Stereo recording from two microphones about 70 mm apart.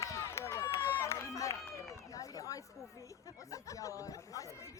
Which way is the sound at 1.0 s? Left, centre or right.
Left.